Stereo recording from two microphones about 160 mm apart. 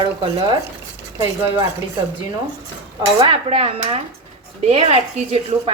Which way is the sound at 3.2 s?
35° right (ahead or behind).